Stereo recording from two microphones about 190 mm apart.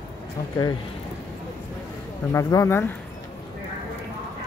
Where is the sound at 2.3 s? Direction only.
15° left (ahead or behind).